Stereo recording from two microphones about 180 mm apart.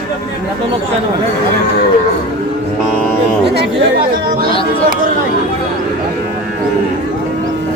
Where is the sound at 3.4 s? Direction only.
65° right (ahead or behind).